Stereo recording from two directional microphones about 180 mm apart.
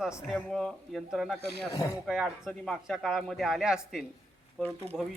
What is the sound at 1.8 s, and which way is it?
Speech, 15° left (ahead or behind).